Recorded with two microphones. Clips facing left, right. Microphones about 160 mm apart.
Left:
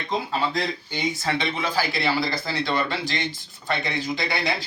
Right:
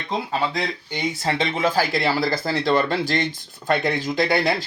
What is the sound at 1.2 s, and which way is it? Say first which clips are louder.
Speech: right 8 dB; 40° right (ahead or behind).